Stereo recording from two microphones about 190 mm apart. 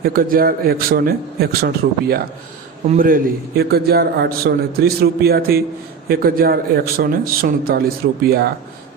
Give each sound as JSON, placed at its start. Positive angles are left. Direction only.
{"t": 0.0, "sound": "a man's voice", "side_deg": -50}